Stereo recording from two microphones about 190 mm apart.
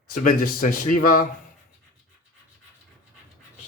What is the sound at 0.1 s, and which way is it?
Speech, 45° left (ahead or behind).